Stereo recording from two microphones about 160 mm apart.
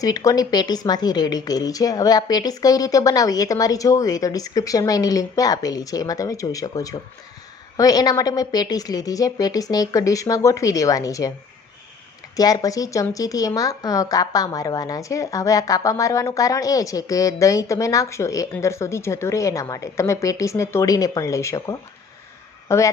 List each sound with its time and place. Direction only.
0.0 s a woman's voice: 20° left (ahead or behind)
12.4 s a woman's voice: 25° left (ahead or behind)